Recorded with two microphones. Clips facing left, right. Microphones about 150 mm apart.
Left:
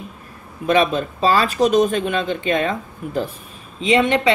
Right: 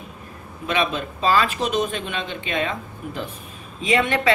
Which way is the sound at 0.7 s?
40° left (ahead or behind).